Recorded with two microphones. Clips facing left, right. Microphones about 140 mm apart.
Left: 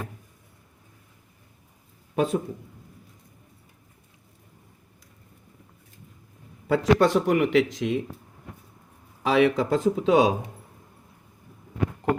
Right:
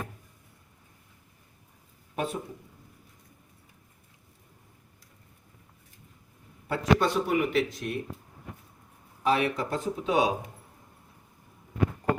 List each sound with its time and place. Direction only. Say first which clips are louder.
2.1 s a man's voice: left 8 dB; 90° left
6.7 s speech: left 5 dB; 85° left
9.2 s speech: left 6 dB; 90° left